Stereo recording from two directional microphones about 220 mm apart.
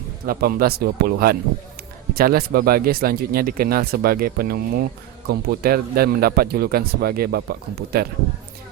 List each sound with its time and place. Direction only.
0.3 s speech: 40° right (ahead or behind)